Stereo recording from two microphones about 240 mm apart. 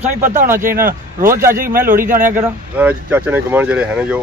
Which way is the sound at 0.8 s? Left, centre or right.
Right.